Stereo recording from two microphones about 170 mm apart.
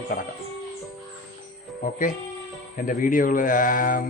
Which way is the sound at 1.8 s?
50° left (ahead or behind).